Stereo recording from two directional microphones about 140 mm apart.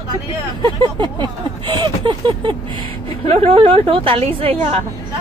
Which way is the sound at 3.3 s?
45° right (ahead or behind).